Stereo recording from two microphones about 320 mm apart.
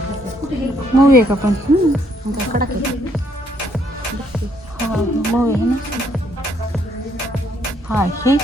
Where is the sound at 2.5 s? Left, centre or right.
Right.